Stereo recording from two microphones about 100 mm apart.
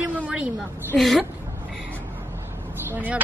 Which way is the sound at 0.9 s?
5° left (ahead or behind).